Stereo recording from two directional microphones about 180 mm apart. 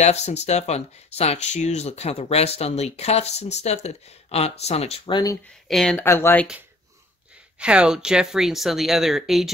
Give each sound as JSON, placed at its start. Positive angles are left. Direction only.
{"t": 0.0, "sound": "speech", "side_deg": 40}
{"t": 5.7, "sound": "speech", "side_deg": 0}
{"t": 6.0, "sound": "speech", "side_deg": 15}
{"t": 7.5, "sound": "speech", "side_deg": -5}